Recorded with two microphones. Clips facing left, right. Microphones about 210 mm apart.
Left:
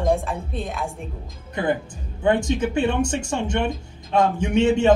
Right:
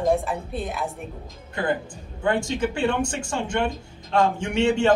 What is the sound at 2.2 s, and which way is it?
A man's voice, 20° left (ahead or behind).